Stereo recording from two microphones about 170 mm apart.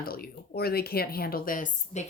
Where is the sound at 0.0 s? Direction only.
60° left (ahead or behind).